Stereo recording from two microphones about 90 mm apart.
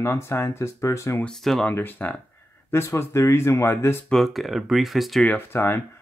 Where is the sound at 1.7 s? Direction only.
20° left (ahead or behind).